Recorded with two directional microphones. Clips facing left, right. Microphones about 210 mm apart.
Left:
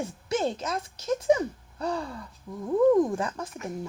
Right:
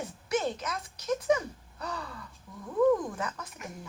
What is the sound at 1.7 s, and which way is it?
Gasp, 30° left (ahead or behind).